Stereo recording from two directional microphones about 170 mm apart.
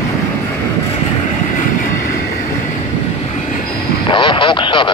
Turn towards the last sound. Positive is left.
turn(degrees=30)  # may be behind; listen again after turning